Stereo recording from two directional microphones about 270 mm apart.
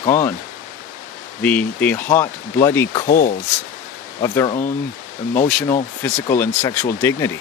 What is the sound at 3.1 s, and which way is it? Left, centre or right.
Speech, left.